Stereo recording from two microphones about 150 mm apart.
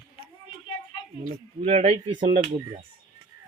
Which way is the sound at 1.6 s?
45° right (ahead or behind).